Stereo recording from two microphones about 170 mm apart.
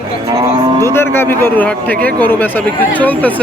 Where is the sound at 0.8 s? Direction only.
15° left (ahead or behind).